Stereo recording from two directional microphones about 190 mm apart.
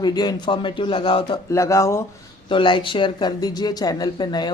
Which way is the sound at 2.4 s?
25° left (ahead or behind).